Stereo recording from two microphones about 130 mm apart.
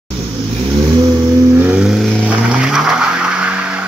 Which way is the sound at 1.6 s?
5° right (ahead or behind).